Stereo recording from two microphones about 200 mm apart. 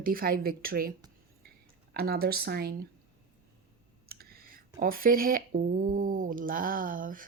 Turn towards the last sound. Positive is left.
turn(degrees=-45)  # may be behind; listen again after turning